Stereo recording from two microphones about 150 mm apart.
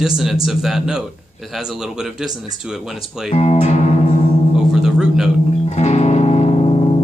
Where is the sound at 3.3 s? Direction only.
45° left (ahead or behind).